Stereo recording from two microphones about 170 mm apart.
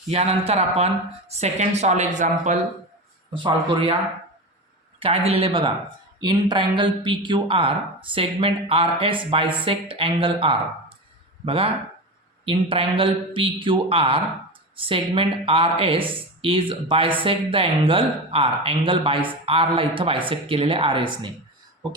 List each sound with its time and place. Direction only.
0.1 s a woman's voice: 40° right (ahead or behind)
3.3 s speech: 30° right (ahead or behind)
4.9 s speech: 35° right (ahead or behind)